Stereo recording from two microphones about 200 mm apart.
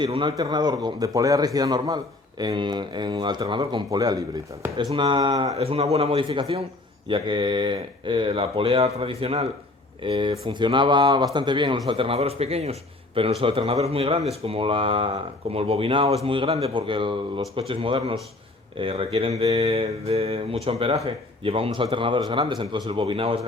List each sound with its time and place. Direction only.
0.0 s speech: 25° right (ahead or behind)
5.5 s speech: 30° right (ahead or behind)